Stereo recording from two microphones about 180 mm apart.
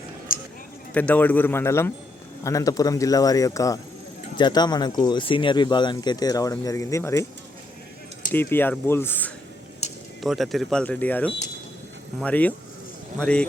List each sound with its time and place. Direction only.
0.3 s a sound: 50° left (ahead or behind)
0.9 s speech: 10° left (ahead or behind)
8.3 s speech: 10° left (ahead or behind)
10.2 s speech: centre (ahead or behind)